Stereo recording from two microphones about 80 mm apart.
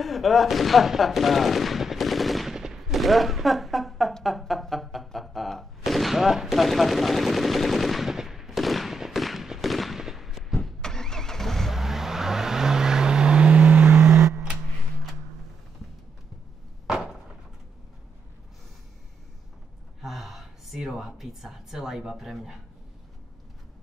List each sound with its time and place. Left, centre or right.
0.0 s gunshot: centre; by 14.0 s right
16.8 s a sound: centre
20.0 s gasp: centre